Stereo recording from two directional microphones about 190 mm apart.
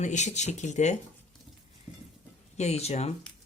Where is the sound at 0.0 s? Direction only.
40° left (ahead or behind).